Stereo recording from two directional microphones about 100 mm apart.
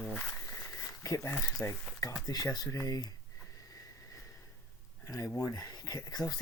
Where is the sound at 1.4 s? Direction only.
30° left (ahead or behind).